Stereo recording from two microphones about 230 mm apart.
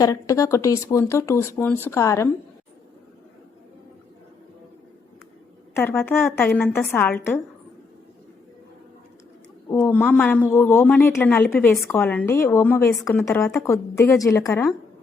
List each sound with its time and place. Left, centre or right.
0.0 s a woman's voice: centre
5.7 s a woman's voice: centre
9.6 s a woman's voice: centre